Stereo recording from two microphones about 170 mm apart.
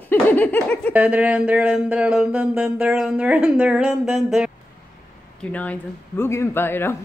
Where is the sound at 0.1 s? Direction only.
10° left (ahead or behind).